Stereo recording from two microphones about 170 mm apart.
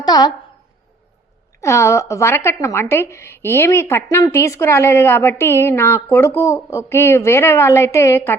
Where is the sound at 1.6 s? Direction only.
15° left (ahead or behind).